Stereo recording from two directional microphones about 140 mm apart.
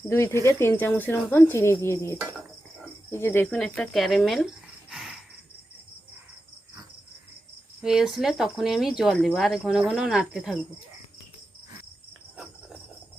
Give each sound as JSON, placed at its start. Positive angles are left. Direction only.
{"t": 0.1, "sound": "speech", "side_deg": 20}
{"t": 3.4, "sound": "speech", "side_deg": 5}
{"t": 4.9, "sound": "cricket", "side_deg": -5}
{"t": 7.8, "sound": "speech", "side_deg": -5}